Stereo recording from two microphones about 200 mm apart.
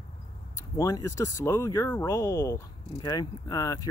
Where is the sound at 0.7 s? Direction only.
15° left (ahead or behind).